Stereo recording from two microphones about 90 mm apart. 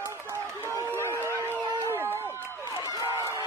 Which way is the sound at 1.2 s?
30° right (ahead or behind).